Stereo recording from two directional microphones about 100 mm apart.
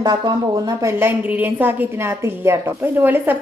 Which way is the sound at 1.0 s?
20° right (ahead or behind).